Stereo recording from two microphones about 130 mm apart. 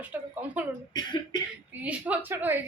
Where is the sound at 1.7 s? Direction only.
10° right (ahead or behind).